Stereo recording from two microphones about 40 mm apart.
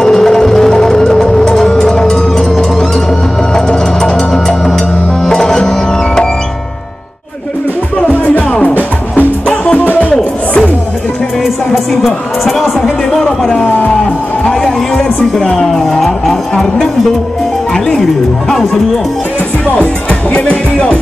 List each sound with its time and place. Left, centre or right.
0.0 s music: centre
9.8 s music: left
11.4 s music: centre
14.4 s music: centre
20.3 s music: left